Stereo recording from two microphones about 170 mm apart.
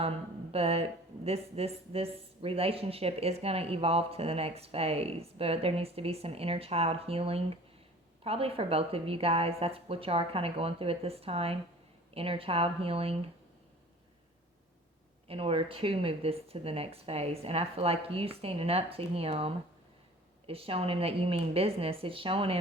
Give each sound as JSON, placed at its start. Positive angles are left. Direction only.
{"t": 0.5, "sound": "speech", "side_deg": -35}
{"t": 15.3, "sound": "speech", "side_deg": -35}